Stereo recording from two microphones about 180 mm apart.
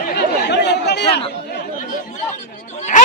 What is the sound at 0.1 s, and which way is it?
Chatter, 70° left (ahead or behind).